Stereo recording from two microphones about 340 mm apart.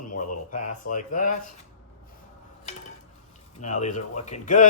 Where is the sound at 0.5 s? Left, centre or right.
Left.